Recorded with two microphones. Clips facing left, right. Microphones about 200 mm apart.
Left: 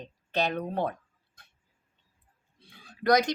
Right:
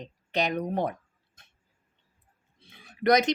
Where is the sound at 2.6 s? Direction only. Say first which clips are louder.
Right 2 dB; 20° right (ahead or behind).